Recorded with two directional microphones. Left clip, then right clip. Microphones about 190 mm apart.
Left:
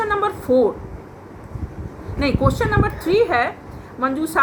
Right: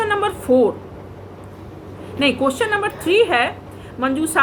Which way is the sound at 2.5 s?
15° right (ahead or behind).